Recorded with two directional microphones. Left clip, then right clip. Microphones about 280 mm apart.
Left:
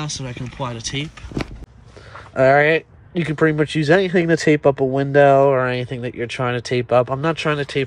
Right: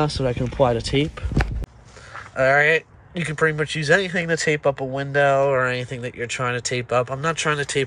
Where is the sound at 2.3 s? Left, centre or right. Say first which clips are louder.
Left 3 dB; centre.